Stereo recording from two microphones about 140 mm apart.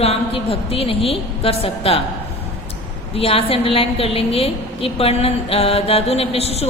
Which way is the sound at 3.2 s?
40° left (ahead or behind).